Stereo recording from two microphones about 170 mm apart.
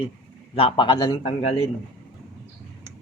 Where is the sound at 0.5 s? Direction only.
30° left (ahead or behind).